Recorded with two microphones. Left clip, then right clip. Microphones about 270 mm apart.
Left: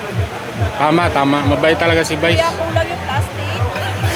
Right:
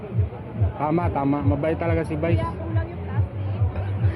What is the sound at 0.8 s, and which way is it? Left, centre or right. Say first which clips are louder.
A man's voice: left 10 dB; centre.